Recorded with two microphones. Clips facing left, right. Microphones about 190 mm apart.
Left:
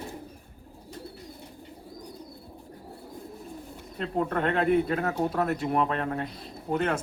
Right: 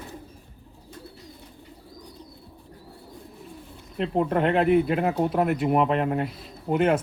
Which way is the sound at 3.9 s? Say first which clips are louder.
Right 5 dB; 25° right (ahead or behind).